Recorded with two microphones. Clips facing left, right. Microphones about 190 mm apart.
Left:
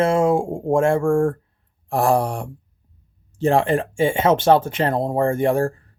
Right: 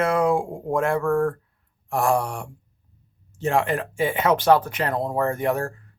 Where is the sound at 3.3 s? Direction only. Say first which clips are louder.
Left 5 dB; 30° left (ahead or behind).